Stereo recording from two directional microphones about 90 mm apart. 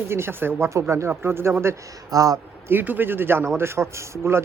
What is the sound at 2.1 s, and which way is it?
Speech, 40° right (ahead or behind).